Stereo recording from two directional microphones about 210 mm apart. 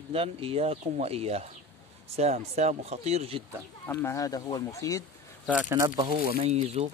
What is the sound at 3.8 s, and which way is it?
Speech, 15° left (ahead or behind).